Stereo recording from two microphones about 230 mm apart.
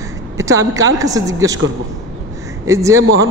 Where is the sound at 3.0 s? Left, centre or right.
Right.